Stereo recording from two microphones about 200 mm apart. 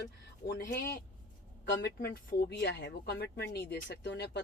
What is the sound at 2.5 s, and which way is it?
Speech, 55° left (ahead or behind).